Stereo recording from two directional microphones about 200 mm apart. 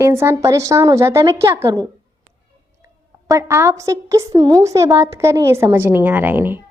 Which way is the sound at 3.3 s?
15° right (ahead or behind).